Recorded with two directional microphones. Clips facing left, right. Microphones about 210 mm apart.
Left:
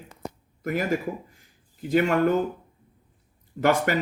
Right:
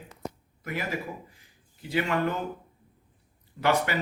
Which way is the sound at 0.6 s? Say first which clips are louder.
Left 7 dB; 45° left (ahead or behind).